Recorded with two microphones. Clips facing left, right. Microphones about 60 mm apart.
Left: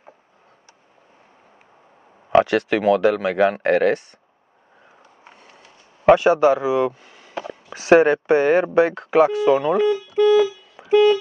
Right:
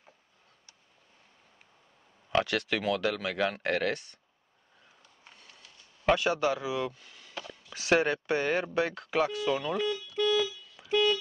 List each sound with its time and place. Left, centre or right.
2.2 s speech: left
5.2 s speech: left